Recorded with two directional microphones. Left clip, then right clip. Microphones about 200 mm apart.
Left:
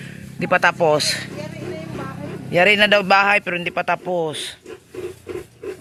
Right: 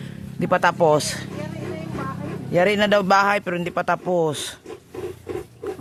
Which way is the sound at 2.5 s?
10° right (ahead or behind).